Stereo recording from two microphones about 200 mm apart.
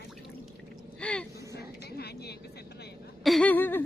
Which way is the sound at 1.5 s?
55° left (ahead or behind).